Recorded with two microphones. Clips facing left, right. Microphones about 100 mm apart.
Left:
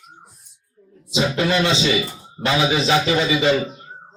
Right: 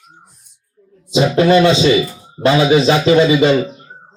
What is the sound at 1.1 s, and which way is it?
Speech, 35° right (ahead or behind).